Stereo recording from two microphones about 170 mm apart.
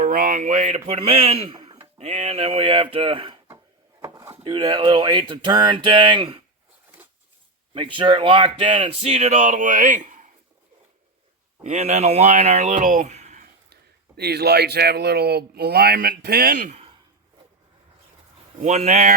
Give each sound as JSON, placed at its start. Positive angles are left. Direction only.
{"t": 0.0, "sound": "speech", "side_deg": -55}
{"t": 4.0, "sound": "speech", "side_deg": -20}
{"t": 7.7, "sound": "speech", "side_deg": -30}
{"t": 11.6, "sound": "speech", "side_deg": -40}
{"t": 14.2, "sound": "speech", "side_deg": -70}
{"t": 18.6, "sound": "speech", "side_deg": -45}